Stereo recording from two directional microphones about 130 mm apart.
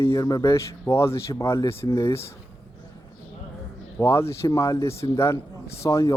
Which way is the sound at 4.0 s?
20° left (ahead or behind).